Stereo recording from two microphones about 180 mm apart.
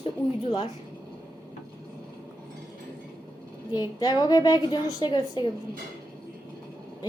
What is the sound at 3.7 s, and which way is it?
A woman's voice, 20° left (ahead or behind).